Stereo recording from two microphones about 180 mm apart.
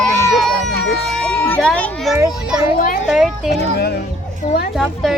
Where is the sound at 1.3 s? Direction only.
10° left (ahead or behind).